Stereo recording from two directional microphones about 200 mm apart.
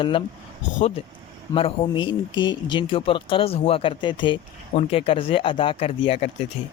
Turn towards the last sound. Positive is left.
turn(degrees=30)  # may be behind; listen again after turning